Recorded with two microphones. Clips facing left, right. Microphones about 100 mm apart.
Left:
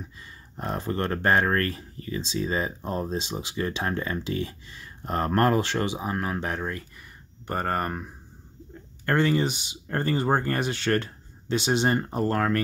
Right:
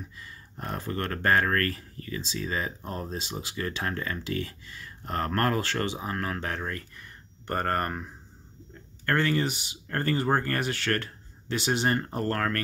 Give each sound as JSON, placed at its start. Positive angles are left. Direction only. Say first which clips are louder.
{"t": 0.2, "sound": "speech", "louder": "left 6 dB", "side_deg": 25}
{"t": 9.0, "sound": "speech", "louder": "left 3 dB", "side_deg": 20}